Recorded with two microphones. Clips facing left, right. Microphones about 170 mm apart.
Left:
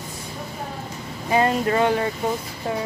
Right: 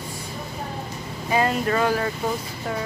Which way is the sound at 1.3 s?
25° left (ahead or behind).